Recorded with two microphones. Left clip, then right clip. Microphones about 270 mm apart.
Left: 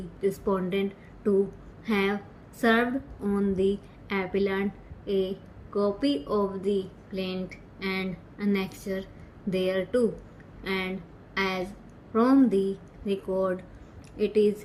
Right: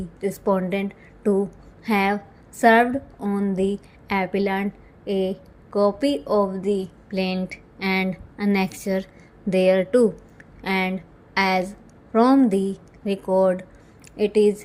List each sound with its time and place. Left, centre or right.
0.2 s a woman's voice: right